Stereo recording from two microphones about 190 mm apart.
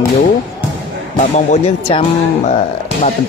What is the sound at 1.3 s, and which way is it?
Speech, 35° left (ahead or behind).